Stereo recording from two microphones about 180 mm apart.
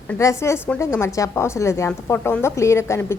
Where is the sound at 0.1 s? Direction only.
15° left (ahead or behind).